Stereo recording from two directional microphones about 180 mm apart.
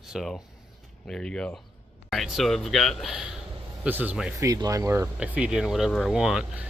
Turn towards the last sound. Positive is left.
turn(degrees=-5)  # may be behind; listen again after turning